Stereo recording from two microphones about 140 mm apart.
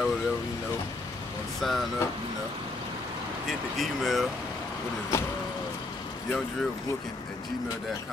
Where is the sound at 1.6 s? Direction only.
Centre (ahead or behind).